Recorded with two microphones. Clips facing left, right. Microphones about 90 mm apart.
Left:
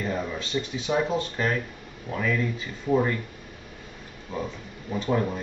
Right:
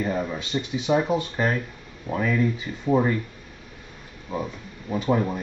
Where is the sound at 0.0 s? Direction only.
15° right (ahead or behind).